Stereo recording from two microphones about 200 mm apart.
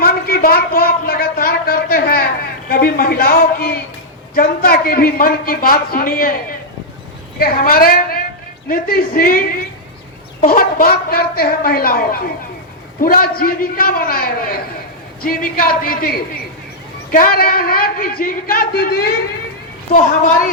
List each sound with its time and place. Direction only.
0.0 s a sound: 50° left (ahead or behind)
2.6 s a woman's voice: 45° left (ahead or behind)
10.4 s speech: 45° left (ahead or behind)